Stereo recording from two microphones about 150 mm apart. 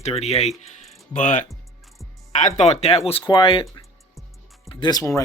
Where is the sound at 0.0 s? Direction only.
45° left (ahead or behind).